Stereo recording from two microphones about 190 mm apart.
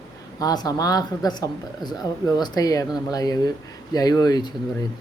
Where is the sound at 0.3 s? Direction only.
20° left (ahead or behind).